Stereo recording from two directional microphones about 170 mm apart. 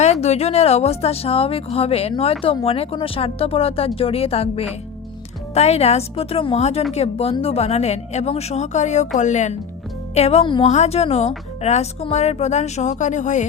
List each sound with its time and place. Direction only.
0.0 s a woman's voice: 40° left (ahead or behind)